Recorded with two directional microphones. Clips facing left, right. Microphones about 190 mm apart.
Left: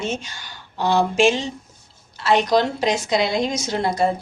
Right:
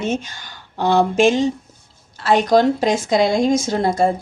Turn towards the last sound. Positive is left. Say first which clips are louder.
# right 3 dB
turn(degrees=-50)  # may be behind; listen again after turning